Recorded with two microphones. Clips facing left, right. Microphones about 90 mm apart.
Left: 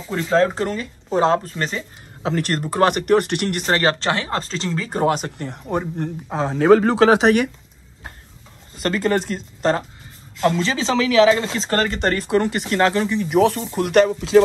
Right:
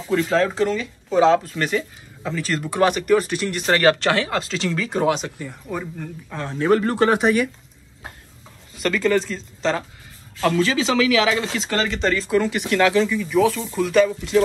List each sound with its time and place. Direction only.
0.1 s speech: 35° left (ahead or behind)
1.5 s speech: 30° left (ahead or behind)
2.8 s speech: 50° left (ahead or behind)
3.6 s speech: 30° left (ahead or behind); by 5.5 s 50° left (ahead or behind)
5.7 s speech: 60° left (ahead or behind)
6.3 s speech: 90° left
8.7 s speech: 40° left (ahead or behind)
10.4 s speech: 30° left (ahead or behind)
11.7 s speech: 45° left (ahead or behind)
12.6 s speech: 35° left (ahead or behind)
13.0 s speech: 55° left (ahead or behind)